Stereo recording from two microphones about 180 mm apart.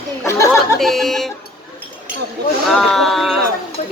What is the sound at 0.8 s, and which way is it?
Speech, centre (ahead or behind).